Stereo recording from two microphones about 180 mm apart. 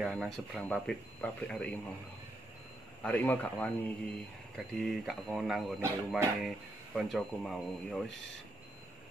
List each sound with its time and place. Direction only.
0.0 s speech: centre (ahead or behind)
3.0 s speech: 10° left (ahead or behind)
5.8 s speech: 15° right (ahead or behind)
6.4 s speech: centre (ahead or behind)